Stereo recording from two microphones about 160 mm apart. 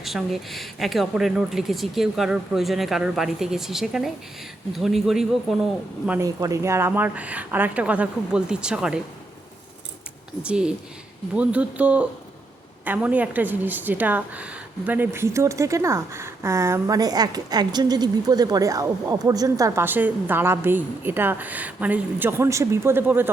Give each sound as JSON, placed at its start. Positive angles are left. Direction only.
{"t": 0.0, "sound": "speech", "side_deg": 0}
{"t": 6.1, "sound": "a woman's voice", "side_deg": -20}
{"t": 10.4, "sound": "a woman's voice", "side_deg": -5}